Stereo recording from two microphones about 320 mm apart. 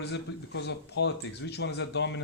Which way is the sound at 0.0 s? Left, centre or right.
Left.